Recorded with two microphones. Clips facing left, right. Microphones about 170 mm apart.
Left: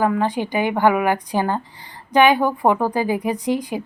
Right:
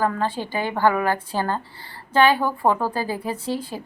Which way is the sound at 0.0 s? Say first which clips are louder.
Left 4 dB; 15° left (ahead or behind).